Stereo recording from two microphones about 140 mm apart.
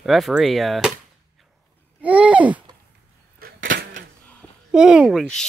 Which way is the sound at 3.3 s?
90° right.